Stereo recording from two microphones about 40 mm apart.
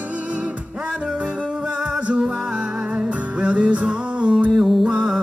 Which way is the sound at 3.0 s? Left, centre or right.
Right.